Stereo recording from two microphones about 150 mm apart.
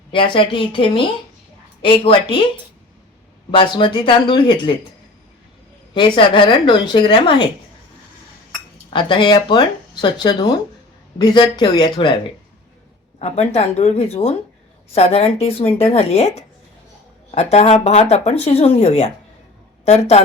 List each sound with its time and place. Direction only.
0.1 s speech: 35° left (ahead or behind)
3.5 s speech: 35° left (ahead or behind)
5.9 s speech: 30° left (ahead or behind)
8.9 s speech: 30° left (ahead or behind)
13.1 s speech: 45° left (ahead or behind)